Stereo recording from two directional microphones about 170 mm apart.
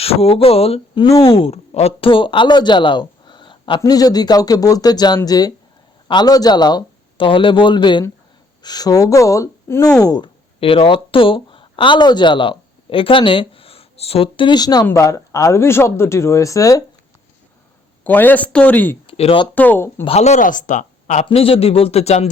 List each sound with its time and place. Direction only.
0.0 s speech: 35° left (ahead or behind)
10.6 s speech: 35° left (ahead or behind)
18.0 s speech: 10° left (ahead or behind)
19.0 s speech: 35° left (ahead or behind)
19.5 s speech: 10° left (ahead or behind)
20.1 s speech: 40° left (ahead or behind)
21.2 s speech: 35° left (ahead or behind)